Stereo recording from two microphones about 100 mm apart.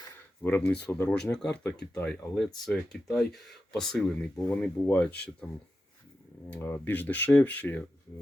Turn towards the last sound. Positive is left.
turn(degrees=15)  # may be behind; listen again after turning